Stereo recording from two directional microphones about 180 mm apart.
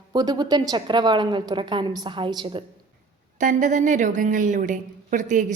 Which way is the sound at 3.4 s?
45° right (ahead or behind).